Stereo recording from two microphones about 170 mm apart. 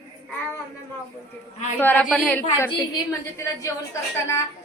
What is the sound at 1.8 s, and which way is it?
Speech, 10° left (ahead or behind).